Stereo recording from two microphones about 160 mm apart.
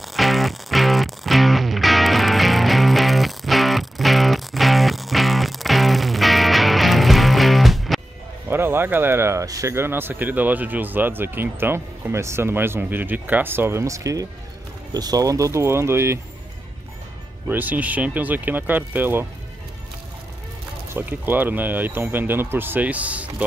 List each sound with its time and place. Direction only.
0.1 s music: centre (ahead or behind)
8.5 s speech: 15° right (ahead or behind)
17.5 s speech: 10° right (ahead or behind)
20.9 s speech: 10° right (ahead or behind)